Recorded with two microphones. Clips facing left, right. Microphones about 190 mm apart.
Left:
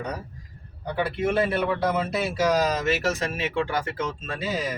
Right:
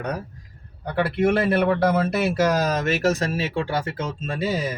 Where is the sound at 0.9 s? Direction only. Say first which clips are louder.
Right 4 dB; 70° right (ahead or behind).